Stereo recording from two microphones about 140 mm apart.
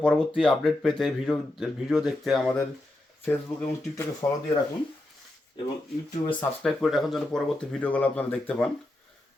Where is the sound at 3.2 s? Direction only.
15° left (ahead or behind).